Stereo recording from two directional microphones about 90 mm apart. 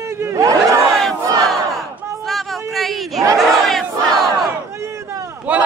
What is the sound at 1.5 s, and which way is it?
Crowd, centre (ahead or behind).